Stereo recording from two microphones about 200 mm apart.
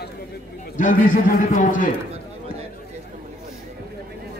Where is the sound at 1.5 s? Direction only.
40° left (ahead or behind).